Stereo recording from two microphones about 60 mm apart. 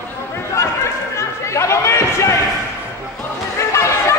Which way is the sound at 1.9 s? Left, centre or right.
Left.